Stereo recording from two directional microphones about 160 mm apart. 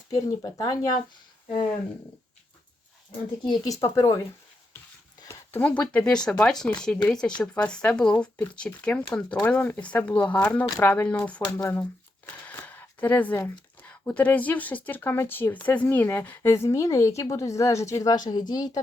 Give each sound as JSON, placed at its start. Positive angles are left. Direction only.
{"t": 0.1, "sound": "speech", "side_deg": 25}
{"t": 3.6, "sound": "speech", "side_deg": 20}
{"t": 5.2, "sound": "speech", "side_deg": 15}
{"t": 11.6, "sound": "speech", "side_deg": 20}
{"t": 12.5, "sound": "speech", "side_deg": 10}